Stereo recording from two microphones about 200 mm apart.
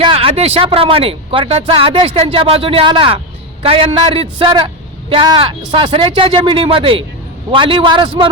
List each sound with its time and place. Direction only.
0.0 s speech: 30° right (ahead or behind)